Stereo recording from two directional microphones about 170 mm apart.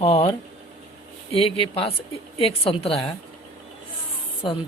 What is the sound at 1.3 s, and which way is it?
A woman's voice, 35° left (ahead or behind).